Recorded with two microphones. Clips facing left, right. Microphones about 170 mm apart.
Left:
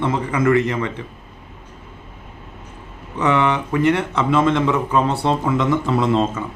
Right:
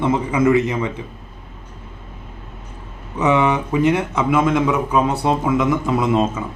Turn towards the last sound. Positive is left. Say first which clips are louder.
# even
turn(degrees=-15)  # may be behind; listen again after turning